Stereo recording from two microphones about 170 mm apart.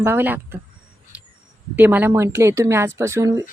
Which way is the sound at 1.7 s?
10° right (ahead or behind).